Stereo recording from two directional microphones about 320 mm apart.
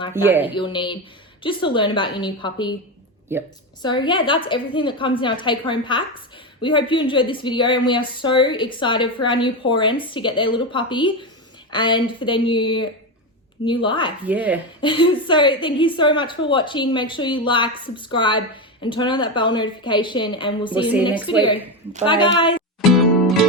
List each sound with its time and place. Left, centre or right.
0.1 s speech: centre
0.5 s a woman's voice: centre
3.3 s speech: centre
3.8 s a woman's voice: centre
14.3 s speech: centre
14.8 s a woman's voice: centre
22.9 s music: centre